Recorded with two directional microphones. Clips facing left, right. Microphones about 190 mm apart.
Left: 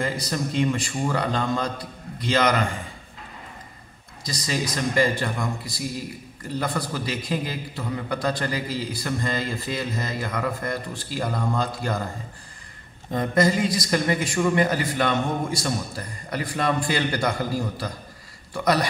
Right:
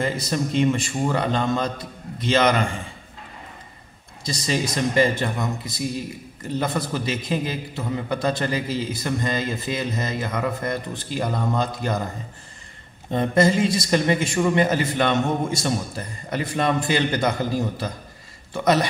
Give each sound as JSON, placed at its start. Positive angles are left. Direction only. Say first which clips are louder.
{"t": 0.0, "sound": "a man's voice", "louder": "right 2 dB", "side_deg": -25}
{"t": 4.2, "sound": "a man's voice", "louder": "right 3 dB", "side_deg": -25}
{"t": 13.1, "sound": "a man's voice", "louder": "right 2 dB", "side_deg": -25}
{"t": 18.5, "sound": "a man's voice", "louder": "right 2 dB", "side_deg": -25}